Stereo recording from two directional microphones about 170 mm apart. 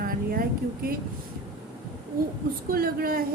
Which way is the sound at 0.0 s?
60° right (ahead or behind).